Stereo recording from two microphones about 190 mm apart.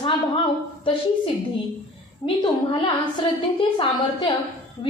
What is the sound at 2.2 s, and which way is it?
A woman's voice, 25° left (ahead or behind).